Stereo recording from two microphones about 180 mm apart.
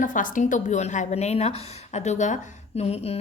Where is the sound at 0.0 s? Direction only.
45° left (ahead or behind).